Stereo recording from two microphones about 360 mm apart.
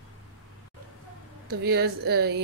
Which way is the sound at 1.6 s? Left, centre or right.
Right.